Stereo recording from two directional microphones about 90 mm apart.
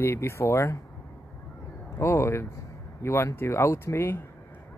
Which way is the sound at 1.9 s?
30° left (ahead or behind).